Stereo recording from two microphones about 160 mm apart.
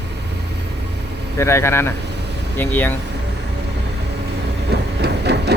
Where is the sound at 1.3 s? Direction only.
15° left (ahead or behind).